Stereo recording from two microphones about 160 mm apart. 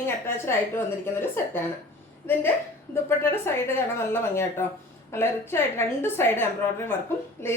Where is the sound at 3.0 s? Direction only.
15° left (ahead or behind).